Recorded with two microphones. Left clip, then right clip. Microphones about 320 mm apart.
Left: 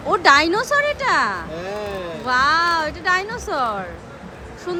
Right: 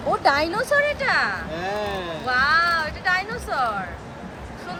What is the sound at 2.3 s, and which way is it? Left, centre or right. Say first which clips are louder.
Speech: left 2 dB; centre.